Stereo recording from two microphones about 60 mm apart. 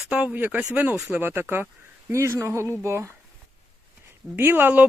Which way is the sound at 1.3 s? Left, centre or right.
Right.